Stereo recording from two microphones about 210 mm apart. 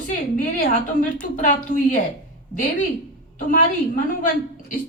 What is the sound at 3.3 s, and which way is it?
Speech, 40° left (ahead or behind).